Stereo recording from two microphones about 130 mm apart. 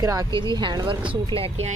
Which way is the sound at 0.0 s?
25° right (ahead or behind).